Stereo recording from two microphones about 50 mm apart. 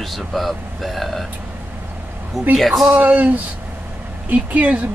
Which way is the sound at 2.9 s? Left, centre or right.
Right.